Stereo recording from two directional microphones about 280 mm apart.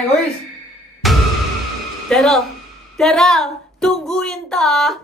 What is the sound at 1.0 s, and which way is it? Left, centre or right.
Music, centre.